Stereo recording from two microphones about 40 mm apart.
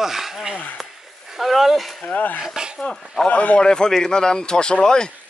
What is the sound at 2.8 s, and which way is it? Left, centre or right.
Speech, centre.